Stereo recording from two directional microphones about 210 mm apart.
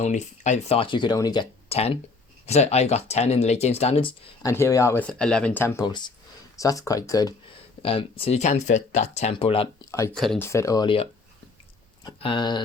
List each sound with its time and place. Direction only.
0.0 s speech: 35° left (ahead or behind)
4.4 s speech: 15° left (ahead or behind)
7.8 s speech: 25° left (ahead or behind)
10.2 s speech: 5° left (ahead or behind); by 12.6 s 20° left (ahead or behind)